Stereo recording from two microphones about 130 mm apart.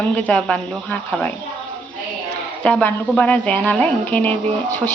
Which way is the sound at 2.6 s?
10° left (ahead or behind).